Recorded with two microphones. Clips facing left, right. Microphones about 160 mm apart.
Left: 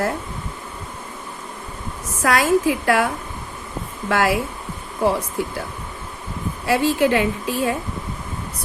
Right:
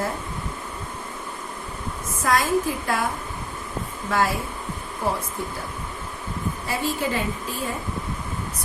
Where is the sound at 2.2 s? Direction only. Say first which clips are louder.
Left 4 dB; 75° left (ahead or behind).